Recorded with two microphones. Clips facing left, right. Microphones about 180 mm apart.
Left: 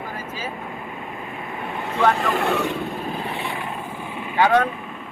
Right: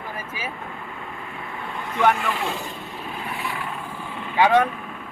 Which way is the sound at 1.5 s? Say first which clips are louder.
Left 2 dB; 20° left (ahead or behind).